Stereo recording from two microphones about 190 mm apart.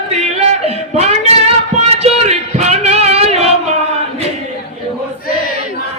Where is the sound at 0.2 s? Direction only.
35° right (ahead or behind).